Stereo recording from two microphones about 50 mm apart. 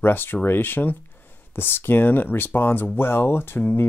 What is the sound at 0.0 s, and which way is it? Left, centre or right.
Speech, left.